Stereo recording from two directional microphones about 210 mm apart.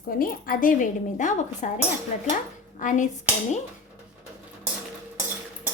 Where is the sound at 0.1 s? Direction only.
45° left (ahead or behind).